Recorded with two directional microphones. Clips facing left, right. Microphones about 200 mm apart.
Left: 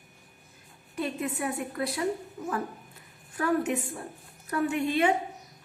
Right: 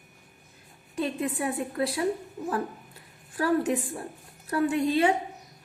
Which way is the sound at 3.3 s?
30° right (ahead or behind).